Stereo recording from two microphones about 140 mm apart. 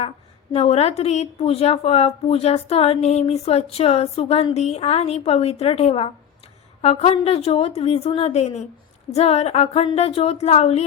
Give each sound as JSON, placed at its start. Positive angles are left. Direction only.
{"t": 0.5, "sound": "a woman's voice", "side_deg": 50}